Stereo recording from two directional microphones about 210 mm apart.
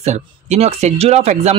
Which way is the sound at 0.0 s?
30° right (ahead or behind).